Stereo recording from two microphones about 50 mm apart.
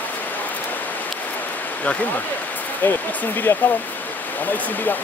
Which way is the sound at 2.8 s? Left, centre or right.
Left.